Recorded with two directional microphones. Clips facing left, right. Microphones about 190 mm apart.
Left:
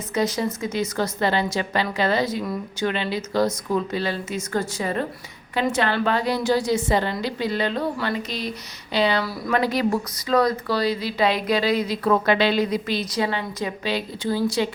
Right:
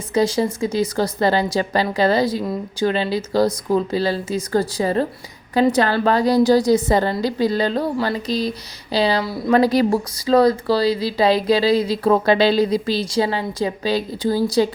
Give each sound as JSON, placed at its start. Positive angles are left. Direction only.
{"t": 0.1, "sound": "speech", "side_deg": -30}